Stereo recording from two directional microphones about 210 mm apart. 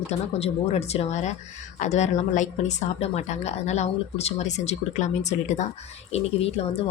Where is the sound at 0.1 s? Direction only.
30° left (ahead or behind).